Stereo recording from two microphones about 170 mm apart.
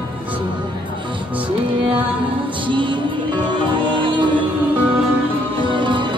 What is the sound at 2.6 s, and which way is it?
Music, 30° right (ahead or behind).